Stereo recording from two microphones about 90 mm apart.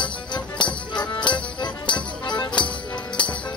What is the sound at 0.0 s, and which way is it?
Music, 60° left (ahead or behind).